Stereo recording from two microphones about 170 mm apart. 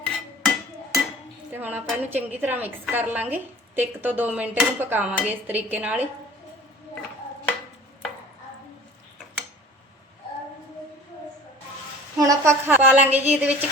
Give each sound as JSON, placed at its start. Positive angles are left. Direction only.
{"t": 0.0, "sound": "a sound", "side_deg": 0}
{"t": 1.5, "sound": "a woman's voice", "side_deg": -10}
{"t": 12.1, "sound": "a woman's voice", "side_deg": -20}